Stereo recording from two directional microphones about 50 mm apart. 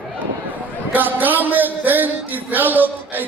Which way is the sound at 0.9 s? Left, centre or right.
Right.